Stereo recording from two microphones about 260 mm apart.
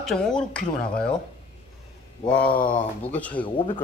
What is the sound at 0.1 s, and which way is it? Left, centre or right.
Speech, centre.